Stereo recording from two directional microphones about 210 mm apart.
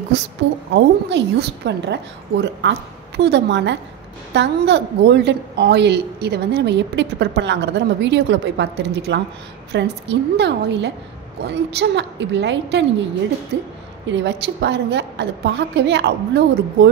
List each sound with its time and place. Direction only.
0.7 s a woman's voice: 55° right (ahead or behind)